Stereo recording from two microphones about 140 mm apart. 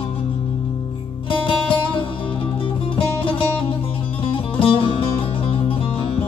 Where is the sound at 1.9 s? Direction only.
40° left (ahead or behind).